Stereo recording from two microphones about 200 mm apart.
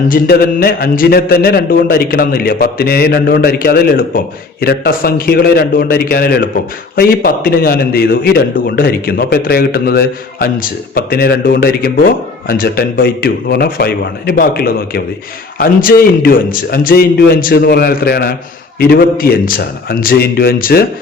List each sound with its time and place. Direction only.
0.1 s a man's voice: 50° left (ahead or behind)